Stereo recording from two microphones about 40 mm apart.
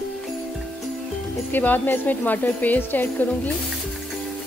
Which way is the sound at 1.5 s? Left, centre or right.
Left.